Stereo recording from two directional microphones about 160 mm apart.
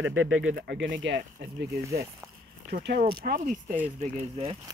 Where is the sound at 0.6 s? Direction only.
90° right.